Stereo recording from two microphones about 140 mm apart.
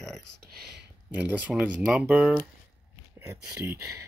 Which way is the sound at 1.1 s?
10° right (ahead or behind).